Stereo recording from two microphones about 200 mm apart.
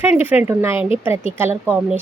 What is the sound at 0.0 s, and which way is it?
A woman's voice, 10° right (ahead or behind).